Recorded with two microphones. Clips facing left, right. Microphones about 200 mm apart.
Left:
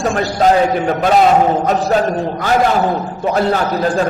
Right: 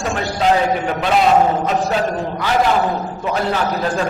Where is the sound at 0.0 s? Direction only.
45° left (ahead or behind).